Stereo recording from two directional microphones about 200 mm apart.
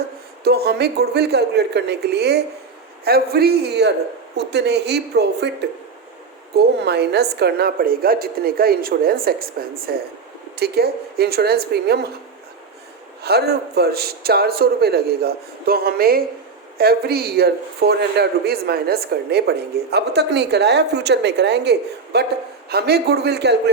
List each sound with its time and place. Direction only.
0.4 s a man's voice: 50° right (ahead or behind)
13.2 s a woman's voice: 55° right (ahead or behind)